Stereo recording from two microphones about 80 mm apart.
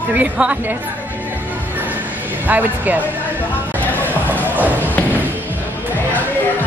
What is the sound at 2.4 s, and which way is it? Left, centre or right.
Speech, right.